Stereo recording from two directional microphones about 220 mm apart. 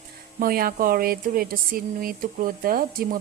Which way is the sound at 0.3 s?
40° right (ahead or behind).